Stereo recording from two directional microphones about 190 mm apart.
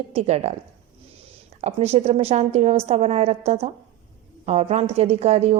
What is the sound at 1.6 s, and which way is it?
A woman's voice, 35° right (ahead or behind).